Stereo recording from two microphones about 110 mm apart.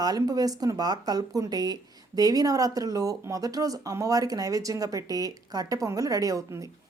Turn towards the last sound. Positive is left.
turn(degrees=-30)  # may be behind; listen again after turning